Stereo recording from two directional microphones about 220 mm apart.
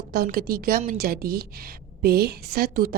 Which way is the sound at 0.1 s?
45° right (ahead or behind).